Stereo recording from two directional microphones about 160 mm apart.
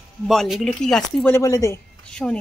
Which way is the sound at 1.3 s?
20° left (ahead or behind).